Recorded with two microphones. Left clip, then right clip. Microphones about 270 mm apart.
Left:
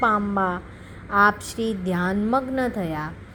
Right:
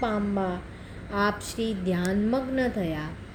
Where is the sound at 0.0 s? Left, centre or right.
Left.